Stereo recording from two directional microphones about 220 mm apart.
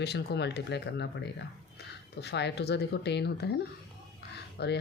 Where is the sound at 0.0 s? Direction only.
50° left (ahead or behind).